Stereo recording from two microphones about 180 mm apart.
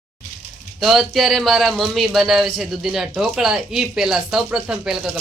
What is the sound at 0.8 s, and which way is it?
Speech, centre (ahead or behind).